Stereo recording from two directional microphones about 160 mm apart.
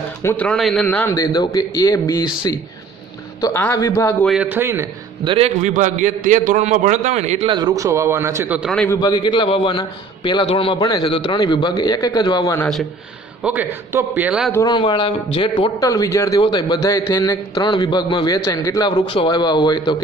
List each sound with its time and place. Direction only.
0.2 s a man's voice: 15° left (ahead or behind)
0.5 s a man's voice: centre (ahead or behind)
0.8 s a man's voice: 15° left (ahead or behind)
4.3 s a man's voice: 10° right (ahead or behind)
5.2 s a man's voice: 35° right (ahead or behind)
5.6 s a man's voice: 55° right (ahead or behind)
7.5 s a man's voice: 20° right (ahead or behind)
8.9 s a man's voice: 25° left (ahead or behind)
13.4 s a man's voice: 10° right (ahead or behind)
14.5 s a man's voice: 25° left (ahead or behind)
15.8 s a man's voice: 20° left (ahead or behind)